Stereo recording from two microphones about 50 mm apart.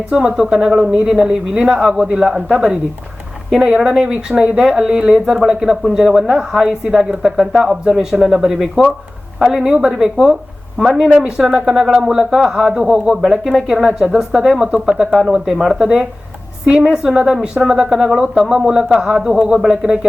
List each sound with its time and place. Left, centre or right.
0.1 s a man's voice: centre
11.1 s a man's voice: centre
13.5 s speech: centre
13.7 s a man's voice: centre